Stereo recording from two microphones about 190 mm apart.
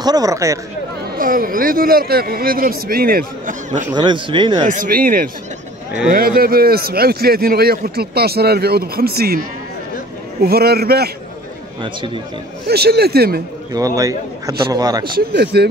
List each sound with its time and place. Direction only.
0.0 s a man's voice: 20° right (ahead or behind)
1.1 s a man's voice: 50° right (ahead or behind)
3.9 s speech: 25° right (ahead or behind)
4.6 s a man's voice: 45° right (ahead or behind)
11.8 s speech: 25° right (ahead or behind)
12.6 s a man's voice: 55° right (ahead or behind)
13.7 s a man's voice: 20° right (ahead or behind)
15.1 s a man's voice: 60° right (ahead or behind)